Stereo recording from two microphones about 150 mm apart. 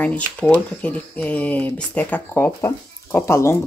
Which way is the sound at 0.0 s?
10° left (ahead or behind).